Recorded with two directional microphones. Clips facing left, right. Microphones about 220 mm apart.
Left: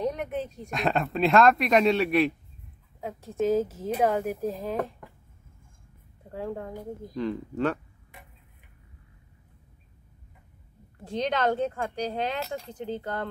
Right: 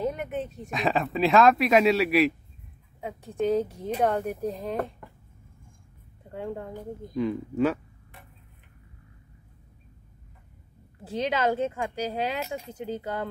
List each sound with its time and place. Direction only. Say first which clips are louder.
0.0 s speech: even; 5° right (ahead or behind)
6.2 s a woman's voice: even; centre (ahead or behind)
11.1 s speech: even; 5° right (ahead or behind)